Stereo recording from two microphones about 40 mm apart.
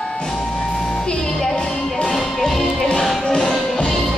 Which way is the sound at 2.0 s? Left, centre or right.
Centre.